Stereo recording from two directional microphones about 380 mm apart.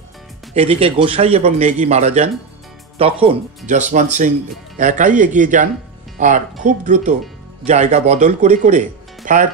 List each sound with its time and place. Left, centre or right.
0.6 s a man's voice: centre